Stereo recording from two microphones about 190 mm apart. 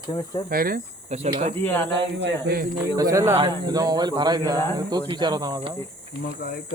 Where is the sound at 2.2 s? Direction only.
55° right (ahead or behind).